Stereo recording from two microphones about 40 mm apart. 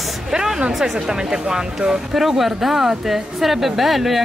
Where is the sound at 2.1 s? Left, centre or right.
Centre.